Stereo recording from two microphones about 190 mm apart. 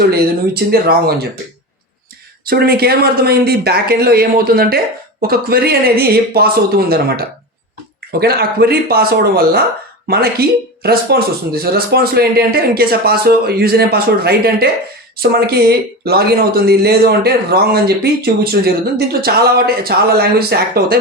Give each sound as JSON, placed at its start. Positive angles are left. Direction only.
{"t": 0.1, "sound": "speech", "side_deg": -55}
{"t": 2.4, "sound": "speech", "side_deg": -55}